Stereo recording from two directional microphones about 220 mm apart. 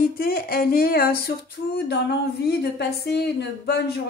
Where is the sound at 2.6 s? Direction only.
45° left (ahead or behind).